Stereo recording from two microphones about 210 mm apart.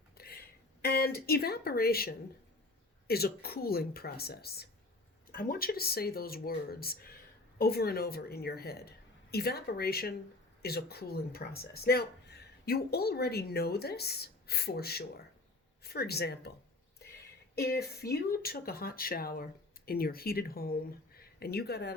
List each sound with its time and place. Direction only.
0.2 s a sound: 45° left (ahead or behind)
3.1 s speech: 50° left (ahead or behind)
17.5 s speech: 50° left (ahead or behind)